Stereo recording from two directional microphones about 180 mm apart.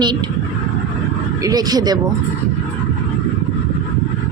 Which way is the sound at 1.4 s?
20° right (ahead or behind).